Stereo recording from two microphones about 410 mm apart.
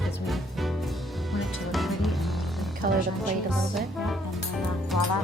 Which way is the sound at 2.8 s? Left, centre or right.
Centre.